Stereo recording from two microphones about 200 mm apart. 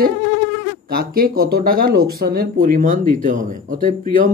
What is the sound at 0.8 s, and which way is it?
Speech, 50° right (ahead or behind).